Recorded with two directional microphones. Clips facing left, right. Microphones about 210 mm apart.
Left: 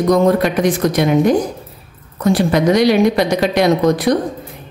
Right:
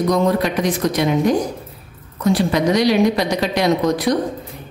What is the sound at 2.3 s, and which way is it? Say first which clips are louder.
Speech: left 4 dB; 55° left (ahead or behind).